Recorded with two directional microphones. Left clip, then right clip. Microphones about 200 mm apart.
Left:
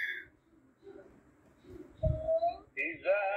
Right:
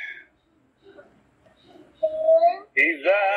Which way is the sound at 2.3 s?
55° right (ahead or behind).